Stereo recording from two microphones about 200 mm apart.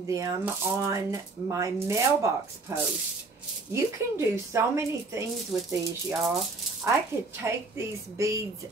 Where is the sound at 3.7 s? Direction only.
15° right (ahead or behind).